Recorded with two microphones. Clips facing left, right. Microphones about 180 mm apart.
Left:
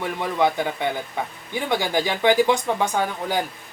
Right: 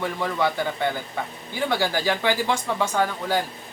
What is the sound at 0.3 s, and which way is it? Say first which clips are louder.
Speech: left 5 dB; 15° left (ahead or behind).